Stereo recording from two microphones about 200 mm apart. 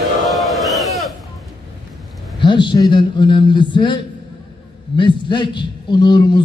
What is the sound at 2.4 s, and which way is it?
A man's voice, 25° left (ahead or behind).